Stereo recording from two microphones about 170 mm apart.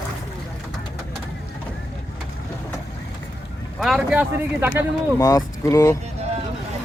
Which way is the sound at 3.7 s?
Centre (ahead or behind).